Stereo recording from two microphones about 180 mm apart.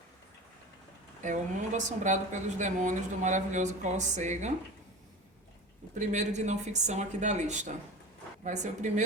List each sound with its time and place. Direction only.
1.2 s a woman's voice: 45° right (ahead or behind)
5.9 s a woman's voice: 40° right (ahead or behind)